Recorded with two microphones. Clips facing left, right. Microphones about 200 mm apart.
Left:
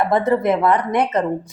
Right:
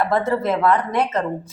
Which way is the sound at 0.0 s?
20° left (ahead or behind).